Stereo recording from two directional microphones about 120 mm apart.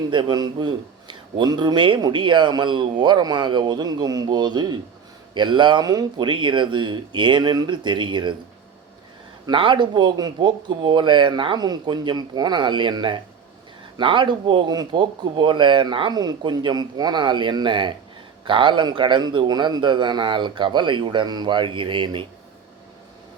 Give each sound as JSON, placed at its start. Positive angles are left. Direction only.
{"t": 0.1, "sound": "a man's voice", "side_deg": -35}
{"t": 9.5, "sound": "a man's voice", "side_deg": -40}